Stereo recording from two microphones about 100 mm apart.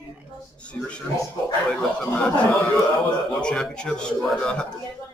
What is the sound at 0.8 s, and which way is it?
A man's voice, 10° left (ahead or behind).